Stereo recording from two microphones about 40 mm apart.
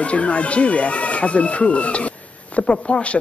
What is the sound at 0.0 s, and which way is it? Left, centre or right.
Speech, left.